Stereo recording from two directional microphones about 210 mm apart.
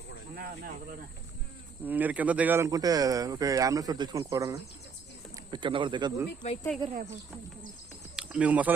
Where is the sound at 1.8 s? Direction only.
10° right (ahead or behind).